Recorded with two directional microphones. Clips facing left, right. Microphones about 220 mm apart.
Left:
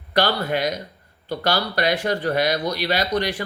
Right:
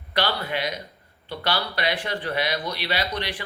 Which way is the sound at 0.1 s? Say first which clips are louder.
Left 5 dB; 45° left (ahead or behind).